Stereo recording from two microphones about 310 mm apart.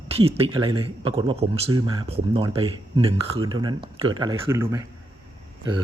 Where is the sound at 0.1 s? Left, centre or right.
Centre.